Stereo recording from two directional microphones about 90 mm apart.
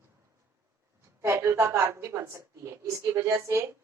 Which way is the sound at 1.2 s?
30° right (ahead or behind).